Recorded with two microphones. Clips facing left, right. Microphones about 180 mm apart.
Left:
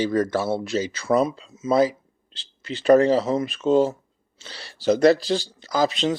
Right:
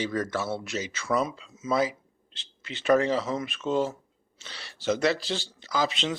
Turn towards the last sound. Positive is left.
turn(degrees=40)  # may be behind; listen again after turning